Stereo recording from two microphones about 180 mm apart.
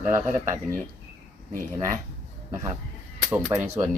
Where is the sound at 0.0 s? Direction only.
15° right (ahead or behind).